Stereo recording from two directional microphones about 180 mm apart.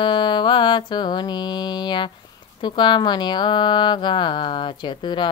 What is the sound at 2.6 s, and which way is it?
Speech, 25° left (ahead or behind).